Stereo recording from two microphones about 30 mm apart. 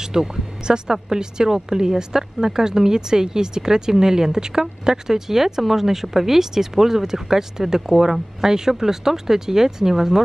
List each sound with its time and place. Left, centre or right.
0.0 s speech: centre